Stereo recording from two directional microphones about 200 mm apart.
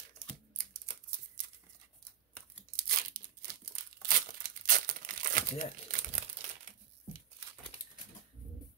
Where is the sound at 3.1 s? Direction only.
45° right (ahead or behind).